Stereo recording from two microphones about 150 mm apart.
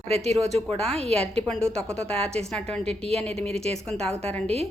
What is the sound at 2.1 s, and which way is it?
Speech, 5° left (ahead or behind).